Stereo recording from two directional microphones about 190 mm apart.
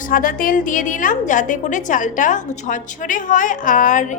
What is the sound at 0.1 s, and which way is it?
A woman's voice, 45° left (ahead or behind).